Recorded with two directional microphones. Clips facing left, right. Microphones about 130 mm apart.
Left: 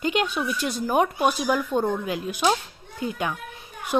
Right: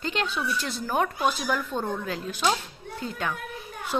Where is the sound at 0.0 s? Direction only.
15° left (ahead or behind).